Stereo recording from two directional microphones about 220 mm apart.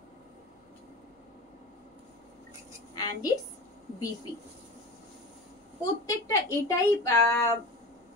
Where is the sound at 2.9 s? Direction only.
15° left (ahead or behind).